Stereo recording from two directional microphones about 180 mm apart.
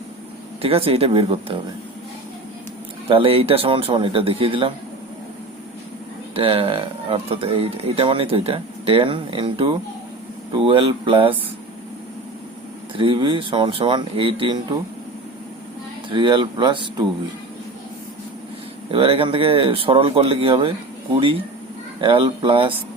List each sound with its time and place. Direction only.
0.6 s speech: 30° right (ahead or behind)
3.1 s speech: 30° right (ahead or behind)
6.3 s speech: 30° right (ahead or behind)
13.0 s speech: 25° right (ahead or behind)
16.0 s speech: 25° right (ahead or behind)
18.9 s speech: 30° right (ahead or behind)
22.0 s speech: 25° right (ahead or behind)